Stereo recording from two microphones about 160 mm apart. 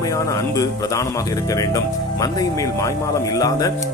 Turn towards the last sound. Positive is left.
turn(degrees=20)  # may be behind; listen again after turning